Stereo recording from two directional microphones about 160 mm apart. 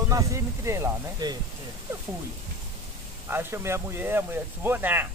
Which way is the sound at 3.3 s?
15° right (ahead or behind).